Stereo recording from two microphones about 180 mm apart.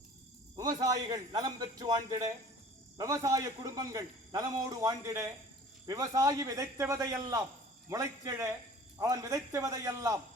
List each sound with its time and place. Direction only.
0.5 s a man's voice: 20° right (ahead or behind)